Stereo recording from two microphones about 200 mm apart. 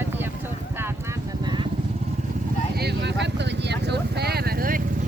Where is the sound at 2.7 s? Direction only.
55° right (ahead or behind).